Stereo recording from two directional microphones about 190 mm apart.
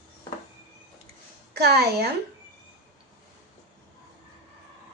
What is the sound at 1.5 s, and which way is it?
Speech, 60° right (ahead or behind).